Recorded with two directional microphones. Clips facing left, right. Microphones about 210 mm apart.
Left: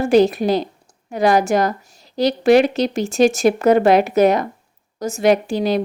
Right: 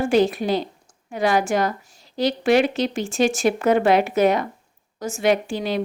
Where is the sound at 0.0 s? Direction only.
40° left (ahead or behind).